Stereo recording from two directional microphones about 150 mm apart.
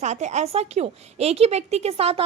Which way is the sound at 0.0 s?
50° right (ahead or behind).